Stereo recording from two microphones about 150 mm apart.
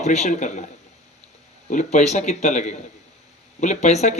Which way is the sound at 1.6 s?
50° left (ahead or behind).